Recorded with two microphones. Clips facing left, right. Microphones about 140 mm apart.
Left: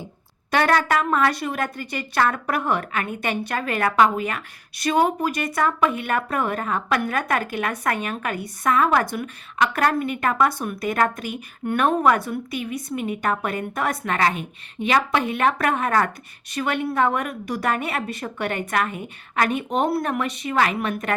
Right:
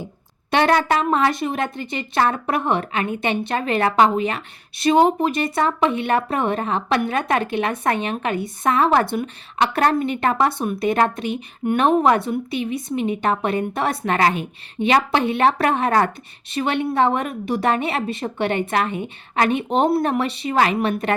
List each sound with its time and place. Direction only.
0.5 s a woman's voice: 25° right (ahead or behind)